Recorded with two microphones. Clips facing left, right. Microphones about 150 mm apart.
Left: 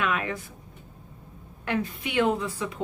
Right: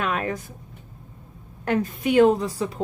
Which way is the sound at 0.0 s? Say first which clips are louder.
Right 2 dB; 40° right (ahead or behind).